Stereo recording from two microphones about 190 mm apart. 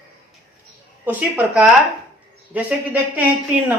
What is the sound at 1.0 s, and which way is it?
Speech, 10° right (ahead or behind).